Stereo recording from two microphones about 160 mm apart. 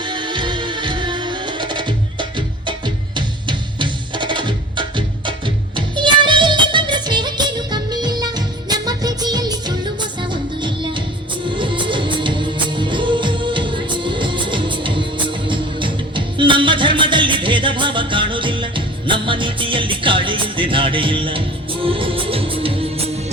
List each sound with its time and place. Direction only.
0.0 s music: 30° right (ahead or behind)